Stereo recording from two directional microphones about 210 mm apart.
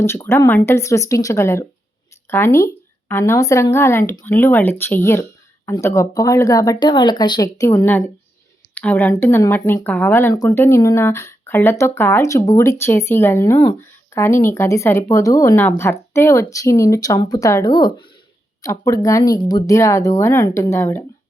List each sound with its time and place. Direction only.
0.0 s speech: 10° left (ahead or behind)